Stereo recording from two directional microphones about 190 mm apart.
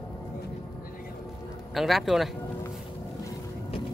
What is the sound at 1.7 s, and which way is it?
Speech, centre (ahead or behind).